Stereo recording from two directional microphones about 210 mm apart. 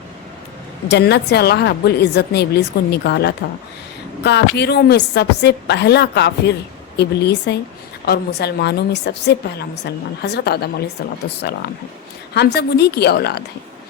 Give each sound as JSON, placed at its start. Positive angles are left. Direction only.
{"t": 0.9, "sound": "a woman's voice", "side_deg": 55}